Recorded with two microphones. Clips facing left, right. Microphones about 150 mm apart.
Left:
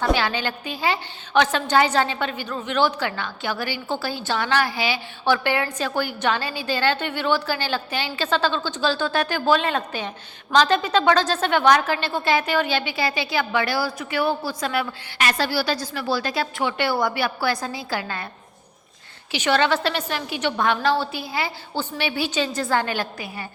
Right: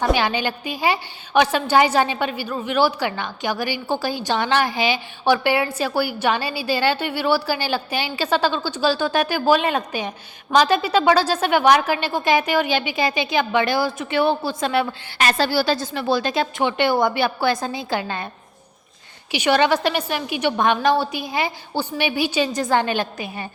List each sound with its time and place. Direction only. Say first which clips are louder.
0.0 s a woman's voice: right 2 dB; 15° right (ahead or behind)
19.3 s a woman's voice: right 3 dB; 15° right (ahead or behind)